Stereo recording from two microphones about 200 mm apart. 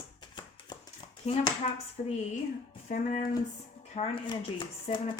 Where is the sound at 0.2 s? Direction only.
25° left (ahead or behind).